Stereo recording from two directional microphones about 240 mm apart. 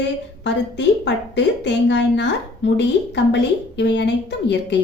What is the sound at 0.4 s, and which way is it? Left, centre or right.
A woman's voice, left.